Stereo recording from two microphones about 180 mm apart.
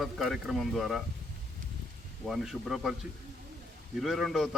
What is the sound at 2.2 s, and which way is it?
Speech, centre (ahead or behind).